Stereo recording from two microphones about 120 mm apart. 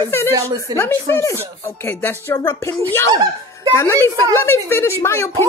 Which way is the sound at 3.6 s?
20° left (ahead or behind).